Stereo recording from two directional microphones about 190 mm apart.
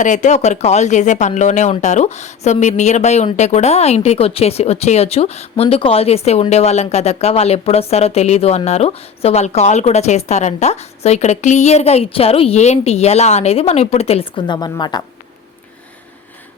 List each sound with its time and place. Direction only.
0.0 s speech: 40° left (ahead or behind); by 15.0 s 20° left (ahead or behind)